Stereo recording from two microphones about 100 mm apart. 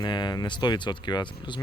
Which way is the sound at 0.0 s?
45° left (ahead or behind).